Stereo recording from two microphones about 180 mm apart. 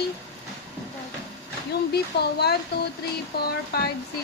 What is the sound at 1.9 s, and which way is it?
Speech, 65° left (ahead or behind).